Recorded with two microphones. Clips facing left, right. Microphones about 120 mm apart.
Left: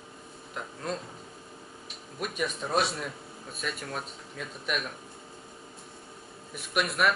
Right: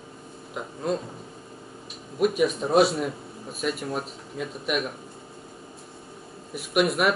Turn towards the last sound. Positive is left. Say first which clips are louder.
# right 5 dB
turn(degrees=-5)  # may be behind; listen again after turning